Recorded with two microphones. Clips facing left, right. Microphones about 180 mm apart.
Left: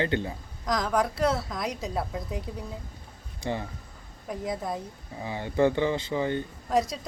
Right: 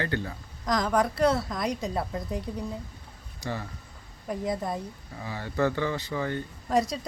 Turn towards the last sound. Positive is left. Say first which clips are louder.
# even
turn(degrees=0)  # may be behind; listen again after turning